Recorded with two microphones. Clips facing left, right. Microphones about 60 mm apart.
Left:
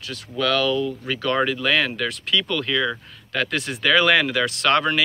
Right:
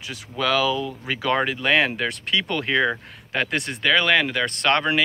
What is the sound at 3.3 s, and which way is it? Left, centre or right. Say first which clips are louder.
Speech: even; centre.